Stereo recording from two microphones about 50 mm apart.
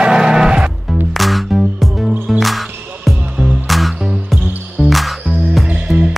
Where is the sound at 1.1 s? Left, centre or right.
Centre.